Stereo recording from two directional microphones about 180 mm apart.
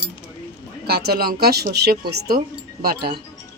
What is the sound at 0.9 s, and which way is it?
A woman's voice, 60° right (ahead or behind).